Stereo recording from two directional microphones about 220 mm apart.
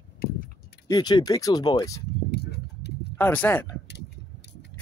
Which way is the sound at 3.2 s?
10° left (ahead or behind).